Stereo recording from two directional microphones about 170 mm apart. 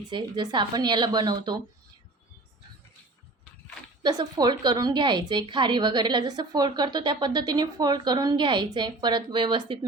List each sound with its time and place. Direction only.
0.1 s a woman's voice: 25° right (ahead or behind)
4.0 s a woman's voice: 25° right (ahead or behind)